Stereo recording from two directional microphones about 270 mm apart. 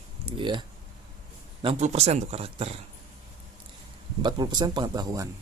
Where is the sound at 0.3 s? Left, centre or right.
Centre.